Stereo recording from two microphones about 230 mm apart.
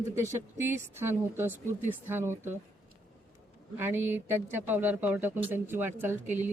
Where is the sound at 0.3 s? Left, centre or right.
Centre.